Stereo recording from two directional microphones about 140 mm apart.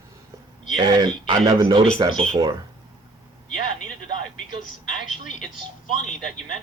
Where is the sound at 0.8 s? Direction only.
30° right (ahead or behind).